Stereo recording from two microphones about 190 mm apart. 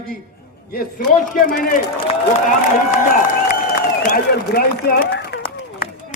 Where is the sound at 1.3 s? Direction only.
50° left (ahead or behind).